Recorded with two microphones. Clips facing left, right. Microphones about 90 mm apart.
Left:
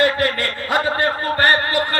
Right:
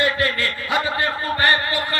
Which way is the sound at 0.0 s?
50° left (ahead or behind).